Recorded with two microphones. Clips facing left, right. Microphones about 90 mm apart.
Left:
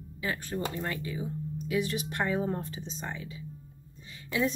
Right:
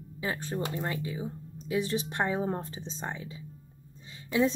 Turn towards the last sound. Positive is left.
turn(degrees=-30)  # may be behind; listen again after turning